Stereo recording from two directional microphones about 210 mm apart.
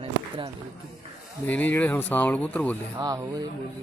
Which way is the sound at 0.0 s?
25° right (ahead or behind).